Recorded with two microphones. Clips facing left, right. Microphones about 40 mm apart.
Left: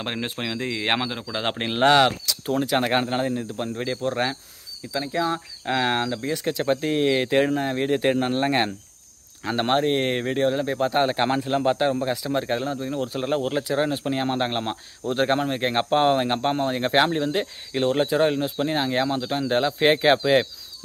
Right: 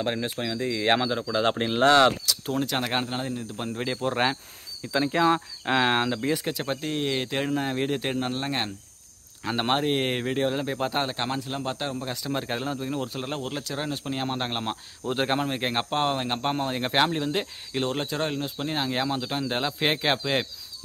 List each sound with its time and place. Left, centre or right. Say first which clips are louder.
0.0 s speech: right 1 dB; left
2.2 s a sound: left 3 dB; centre
2.8 s speech: left 6 dB; centre
3.5 s speech: left 2 dB; centre
4.9 s speech: right 3 dB; right
5.7 s speech: even; centre
7.5 s speech: left 3 dB; centre; by 8.7 s left
9.4 s speech: left 3 dB; centre
11.1 s speech: left 7 dB; left
12.2 s speech: left 5 dB; centre